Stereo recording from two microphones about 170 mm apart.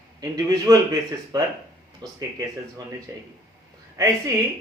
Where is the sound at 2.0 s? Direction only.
25° right (ahead or behind).